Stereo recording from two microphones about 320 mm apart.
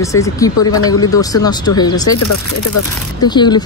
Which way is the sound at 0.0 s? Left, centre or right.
Centre.